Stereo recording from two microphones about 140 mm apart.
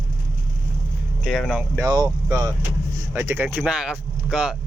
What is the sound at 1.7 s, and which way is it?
Speech, 25° right (ahead or behind).